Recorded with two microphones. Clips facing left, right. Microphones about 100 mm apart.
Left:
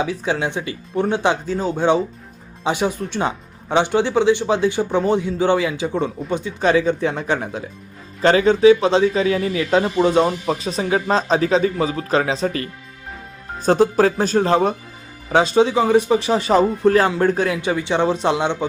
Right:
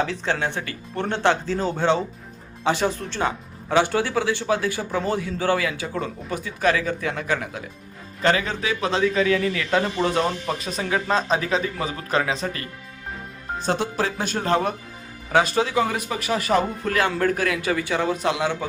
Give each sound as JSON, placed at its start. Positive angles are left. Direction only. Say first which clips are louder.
{"t": 0.0, "sound": "speech", "louder": "left 3 dB", "side_deg": 10}
{"t": 13.7, "sound": "speech", "louder": "left 10 dB", "side_deg": 40}